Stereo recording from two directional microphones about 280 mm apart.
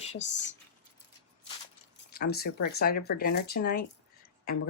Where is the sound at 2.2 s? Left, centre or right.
Left.